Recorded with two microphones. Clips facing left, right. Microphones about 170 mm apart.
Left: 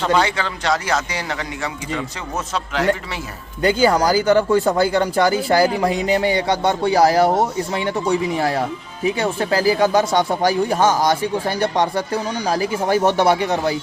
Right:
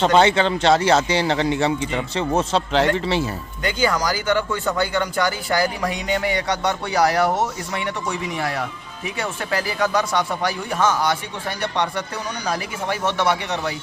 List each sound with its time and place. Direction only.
0.0 s speech: 25° right (ahead or behind)
3.6 s a man's voice: 30° left (ahead or behind)